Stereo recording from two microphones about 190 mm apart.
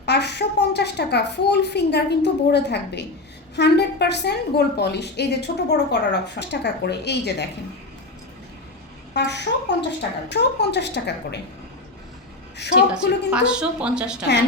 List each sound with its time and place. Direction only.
0.0 s a woman's voice: 60° left (ahead or behind)
9.1 s a woman's voice: 65° left (ahead or behind)
12.7 s a woman's voice: 5° right (ahead or behind)